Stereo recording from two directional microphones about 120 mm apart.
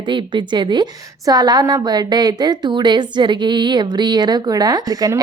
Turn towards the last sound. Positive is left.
turn(degrees=-30)  # may be behind; listen again after turning